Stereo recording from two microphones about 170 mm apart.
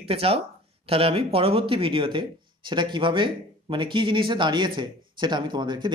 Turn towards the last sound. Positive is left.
turn(degrees=-25)  # may be behind; listen again after turning